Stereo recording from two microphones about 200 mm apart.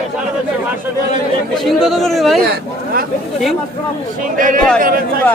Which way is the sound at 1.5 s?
Centre (ahead or behind).